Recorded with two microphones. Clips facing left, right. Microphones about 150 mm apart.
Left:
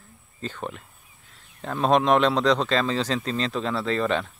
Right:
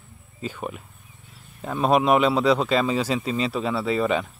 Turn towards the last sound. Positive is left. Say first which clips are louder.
# right 2 dB
turn(degrees=-5)  # may be behind; listen again after turning